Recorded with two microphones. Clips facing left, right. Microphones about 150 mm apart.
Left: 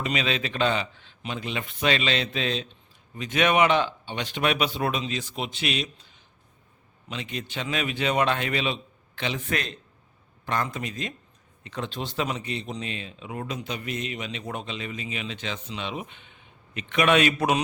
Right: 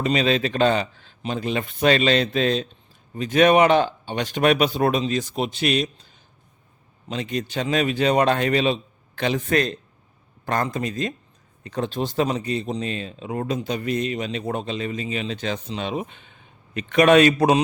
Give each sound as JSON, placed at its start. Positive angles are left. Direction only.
{"t": 0.0, "sound": "speech", "side_deg": -40}
{"t": 7.1, "sound": "speech", "side_deg": -40}